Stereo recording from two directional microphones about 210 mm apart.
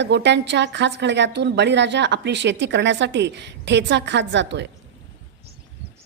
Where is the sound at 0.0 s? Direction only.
55° right (ahead or behind).